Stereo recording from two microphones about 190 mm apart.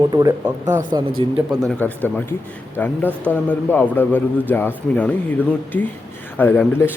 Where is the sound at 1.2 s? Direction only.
25° right (ahead or behind).